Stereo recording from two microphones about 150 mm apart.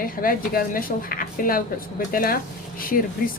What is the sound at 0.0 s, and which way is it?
Speech, 70° left (ahead or behind).